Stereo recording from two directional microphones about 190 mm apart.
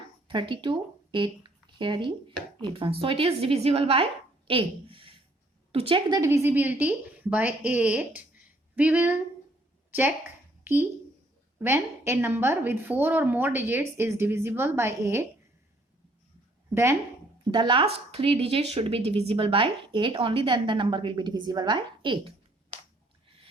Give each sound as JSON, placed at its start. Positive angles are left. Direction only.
{"t": 0.3, "sound": "a woman's voice", "side_deg": -25}
{"t": 9.9, "sound": "a sound", "side_deg": -10}
{"t": 11.6, "sound": "a woman's voice", "side_deg": -15}
{"t": 17.5, "sound": "speech", "side_deg": -25}